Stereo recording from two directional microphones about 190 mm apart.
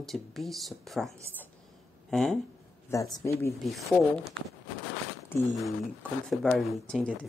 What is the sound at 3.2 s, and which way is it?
Speech, 15° left (ahead or behind).